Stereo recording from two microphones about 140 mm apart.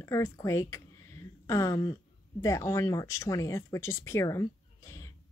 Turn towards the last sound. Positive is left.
turn(degrees=20)  # may be behind; listen again after turning